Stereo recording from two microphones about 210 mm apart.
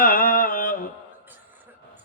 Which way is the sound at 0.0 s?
45° left (ahead or behind).